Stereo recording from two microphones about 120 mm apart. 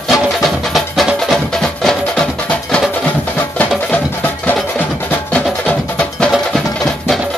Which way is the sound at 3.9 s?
15° left (ahead or behind).